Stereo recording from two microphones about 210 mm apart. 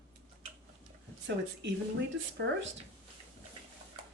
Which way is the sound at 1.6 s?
55° right (ahead or behind).